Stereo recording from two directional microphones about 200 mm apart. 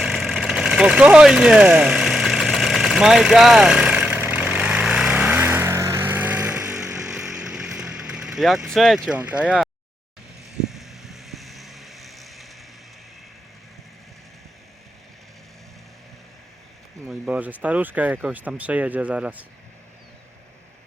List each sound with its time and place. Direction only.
0.0 s engine: centre (ahead or behind)
4.3 s vehicle: 5° right (ahead or behind)
9.0 s speech: 5° right (ahead or behind)
10.6 s vehicle: centre (ahead or behind)
17.1 s speech: 5° right (ahead or behind)